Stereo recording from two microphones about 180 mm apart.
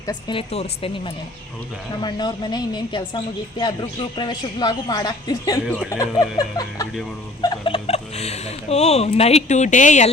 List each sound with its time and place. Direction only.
0.0 s speech: 25° left (ahead or behind)
2.0 s speech: 25° left (ahead or behind); by 10.1 s 40° left (ahead or behind)